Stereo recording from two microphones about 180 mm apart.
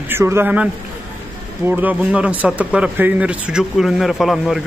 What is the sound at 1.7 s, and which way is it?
Speech, 10° right (ahead or behind).